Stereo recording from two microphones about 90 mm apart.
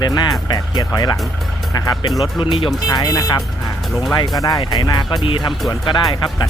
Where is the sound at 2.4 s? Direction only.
70° left (ahead or behind).